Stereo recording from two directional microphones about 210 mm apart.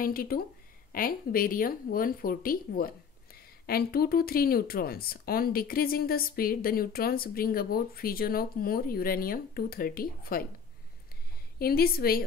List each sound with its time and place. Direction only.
0.0 s speech: 45° left (ahead or behind)
11.5 s speech: 45° left (ahead or behind)